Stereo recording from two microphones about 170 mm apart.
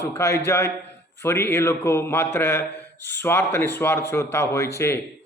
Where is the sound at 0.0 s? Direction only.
15° left (ahead or behind).